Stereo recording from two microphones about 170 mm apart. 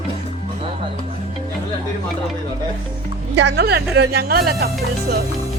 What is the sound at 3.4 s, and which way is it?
A woman's voice, 75° right (ahead or behind).